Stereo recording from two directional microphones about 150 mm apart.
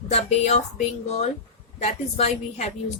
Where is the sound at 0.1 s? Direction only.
45° left (ahead or behind).